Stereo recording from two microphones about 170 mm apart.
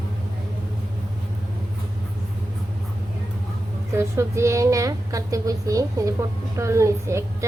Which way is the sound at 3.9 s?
15° right (ahead or behind).